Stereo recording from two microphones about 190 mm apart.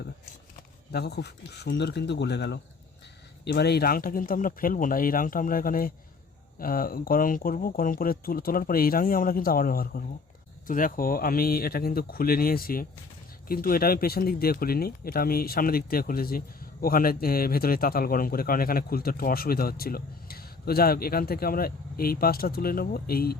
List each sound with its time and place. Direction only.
0.9 s speech: 60° left (ahead or behind)